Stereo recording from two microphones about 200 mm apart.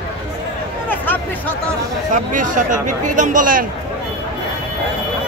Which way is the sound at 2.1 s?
40° right (ahead or behind).